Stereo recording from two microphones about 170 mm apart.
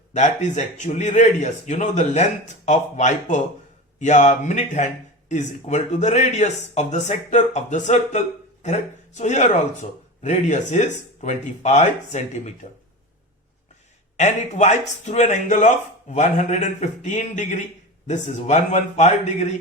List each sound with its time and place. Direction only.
0.1 s speech: 45° left (ahead or behind)
14.2 s speech: 40° left (ahead or behind)